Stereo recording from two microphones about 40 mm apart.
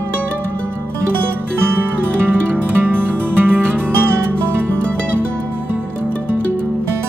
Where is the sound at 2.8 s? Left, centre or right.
Right.